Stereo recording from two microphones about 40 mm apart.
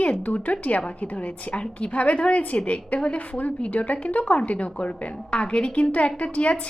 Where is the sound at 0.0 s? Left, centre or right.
Left.